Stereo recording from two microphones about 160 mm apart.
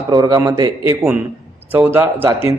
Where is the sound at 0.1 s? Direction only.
25° right (ahead or behind).